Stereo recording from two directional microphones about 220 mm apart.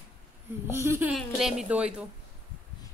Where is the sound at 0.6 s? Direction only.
10° right (ahead or behind).